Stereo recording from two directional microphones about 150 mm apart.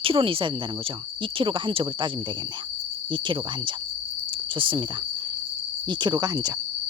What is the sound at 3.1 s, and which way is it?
Speech, 35° right (ahead or behind).